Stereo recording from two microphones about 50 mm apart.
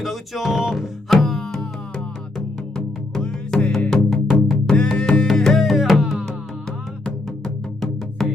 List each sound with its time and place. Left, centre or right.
0.0 s music: centre
5.5 s music: centre
8.2 s music: centre